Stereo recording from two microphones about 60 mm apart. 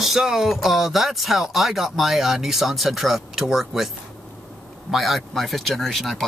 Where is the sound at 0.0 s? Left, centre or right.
Centre.